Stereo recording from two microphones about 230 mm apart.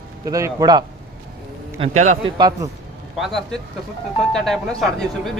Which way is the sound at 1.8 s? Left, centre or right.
Right.